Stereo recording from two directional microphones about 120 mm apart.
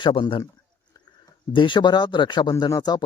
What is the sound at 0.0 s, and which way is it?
Speech, 45° left (ahead or behind).